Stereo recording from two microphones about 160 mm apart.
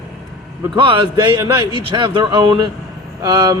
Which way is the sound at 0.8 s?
30° right (ahead or behind).